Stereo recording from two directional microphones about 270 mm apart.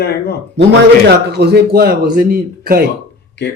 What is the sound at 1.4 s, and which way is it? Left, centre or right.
Speech, right.